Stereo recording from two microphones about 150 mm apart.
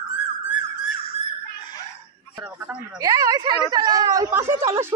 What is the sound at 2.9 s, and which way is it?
Speech, 25° right (ahead or behind).